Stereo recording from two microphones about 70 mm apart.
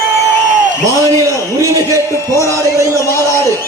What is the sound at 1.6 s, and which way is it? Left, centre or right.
Speech, right.